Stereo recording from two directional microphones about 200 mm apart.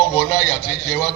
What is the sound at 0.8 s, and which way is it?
Speech, centre (ahead or behind).